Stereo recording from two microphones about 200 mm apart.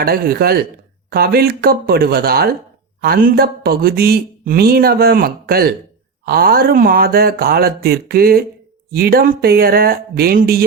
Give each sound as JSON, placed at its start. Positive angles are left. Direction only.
{"t": 0.0, "sound": "speech", "side_deg": -50}